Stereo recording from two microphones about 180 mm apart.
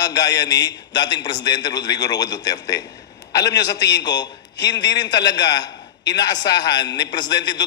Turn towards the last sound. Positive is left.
turn(degrees=25)  # may be behind; listen again after turning